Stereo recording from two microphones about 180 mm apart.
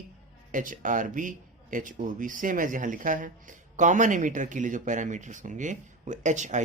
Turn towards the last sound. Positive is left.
turn(degrees=-40)  # may be behind; listen again after turning